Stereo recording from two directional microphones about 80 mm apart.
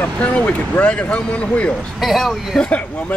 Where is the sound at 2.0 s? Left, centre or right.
Centre.